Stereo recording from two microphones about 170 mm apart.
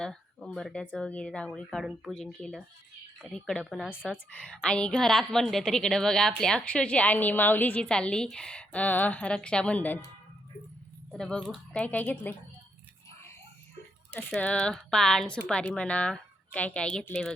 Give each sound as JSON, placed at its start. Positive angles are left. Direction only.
{"t": 0.0, "sound": "a woman's voice", "side_deg": 5}
{"t": 11.1, "sound": "a woman's voice", "side_deg": 5}
{"t": 14.1, "sound": "a woman's voice", "side_deg": 5}